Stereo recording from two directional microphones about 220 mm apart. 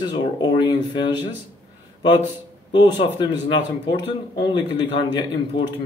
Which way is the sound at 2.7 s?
20° left (ahead or behind).